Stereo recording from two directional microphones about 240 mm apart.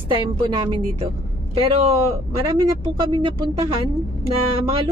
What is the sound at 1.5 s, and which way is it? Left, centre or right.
Speech, right.